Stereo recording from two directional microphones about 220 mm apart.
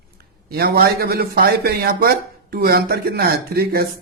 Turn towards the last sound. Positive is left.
turn(degrees=-45)  # may be behind; listen again after turning